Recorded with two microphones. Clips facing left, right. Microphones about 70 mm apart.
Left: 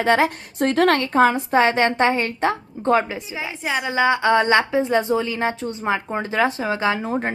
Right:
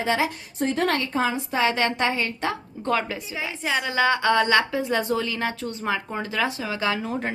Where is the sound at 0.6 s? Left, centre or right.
Left.